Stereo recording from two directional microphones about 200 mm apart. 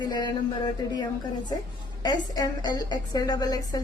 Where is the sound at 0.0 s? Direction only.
20° left (ahead or behind).